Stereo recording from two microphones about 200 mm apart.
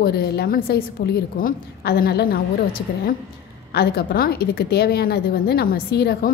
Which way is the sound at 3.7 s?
50° left (ahead or behind).